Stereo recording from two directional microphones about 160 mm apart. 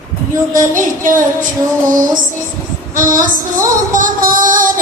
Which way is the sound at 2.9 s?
60° right (ahead or behind).